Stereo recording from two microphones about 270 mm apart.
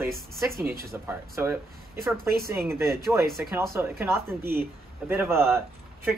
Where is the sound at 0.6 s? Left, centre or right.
Right.